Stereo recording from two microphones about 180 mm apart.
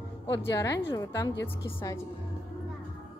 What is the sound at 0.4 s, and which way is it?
Speech, 15° left (ahead or behind).